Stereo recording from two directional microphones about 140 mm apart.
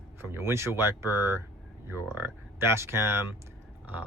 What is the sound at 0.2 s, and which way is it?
Speech, 20° right (ahead or behind).